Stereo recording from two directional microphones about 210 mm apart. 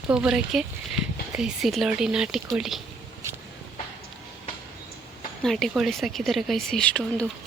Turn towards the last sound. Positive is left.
turn(degrees=5)  # may be behind; listen again after turning